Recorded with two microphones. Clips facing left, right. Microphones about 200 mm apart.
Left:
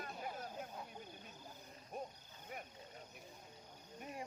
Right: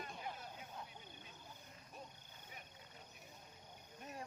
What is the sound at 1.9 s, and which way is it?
Music, 55° left (ahead or behind).